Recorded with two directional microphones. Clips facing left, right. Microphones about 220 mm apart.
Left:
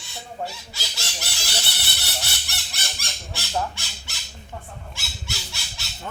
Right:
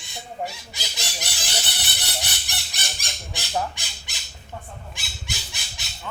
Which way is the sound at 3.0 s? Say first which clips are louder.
Even; 15° right (ahead or behind).